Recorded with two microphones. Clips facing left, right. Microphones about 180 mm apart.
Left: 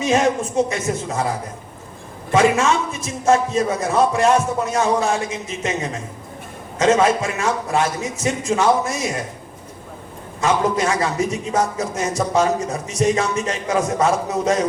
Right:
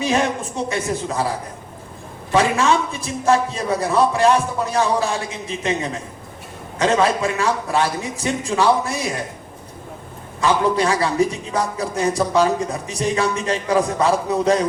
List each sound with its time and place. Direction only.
0.7 s a man's voice: 35° right (ahead or behind)
2.3 s a man's voice: 35° right (ahead or behind)
10.4 s a man's voice: 35° right (ahead or behind)